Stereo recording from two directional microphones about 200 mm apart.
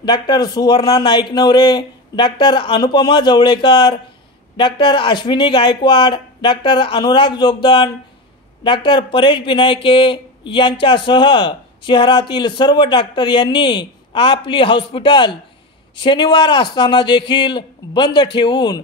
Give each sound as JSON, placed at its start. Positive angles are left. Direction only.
{"t": 0.0, "sound": "speech", "side_deg": 20}